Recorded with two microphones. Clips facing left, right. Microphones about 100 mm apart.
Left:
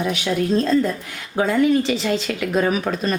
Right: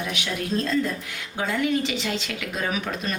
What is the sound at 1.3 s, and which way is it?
Speech, 35° left (ahead or behind).